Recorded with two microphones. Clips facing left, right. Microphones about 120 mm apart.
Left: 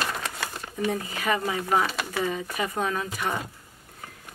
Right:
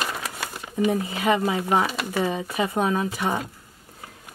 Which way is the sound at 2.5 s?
25° right (ahead or behind).